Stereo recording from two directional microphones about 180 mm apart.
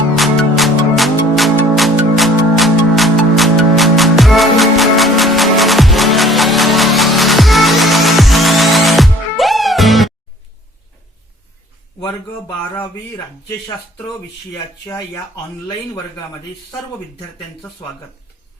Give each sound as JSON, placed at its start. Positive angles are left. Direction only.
{"t": 0.2, "sound": "music", "side_deg": 0}
{"t": 14.8, "sound": "speech", "side_deg": 20}